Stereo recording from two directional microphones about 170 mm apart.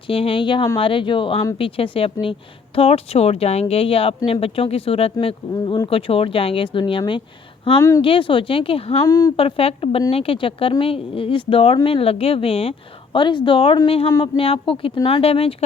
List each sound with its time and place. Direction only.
0.1 s speech: 30° left (ahead or behind)
7.8 s speech: 20° left (ahead or behind)
8.0 s speech: 30° left (ahead or behind)
9.0 s speech: 20° left (ahead or behind)
9.3 s speech: 35° left (ahead or behind)